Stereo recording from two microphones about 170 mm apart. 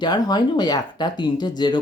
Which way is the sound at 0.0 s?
25° left (ahead or behind).